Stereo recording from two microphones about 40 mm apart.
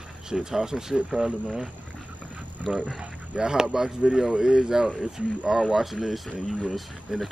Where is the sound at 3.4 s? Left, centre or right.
Centre.